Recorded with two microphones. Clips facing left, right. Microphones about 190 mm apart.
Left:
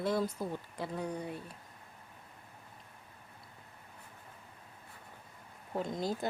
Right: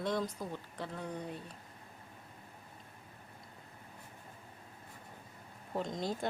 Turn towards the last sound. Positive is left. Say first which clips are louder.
# left 2 dB
turn(degrees=0)  # may be behind; listen again after turning